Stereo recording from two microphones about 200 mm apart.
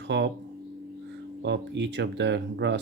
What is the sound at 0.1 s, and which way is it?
Speech, 65° right (ahead or behind).